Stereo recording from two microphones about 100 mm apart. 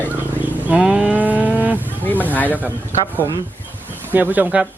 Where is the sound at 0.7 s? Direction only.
10° right (ahead or behind).